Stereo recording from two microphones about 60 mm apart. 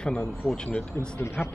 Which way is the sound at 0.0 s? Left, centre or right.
Centre.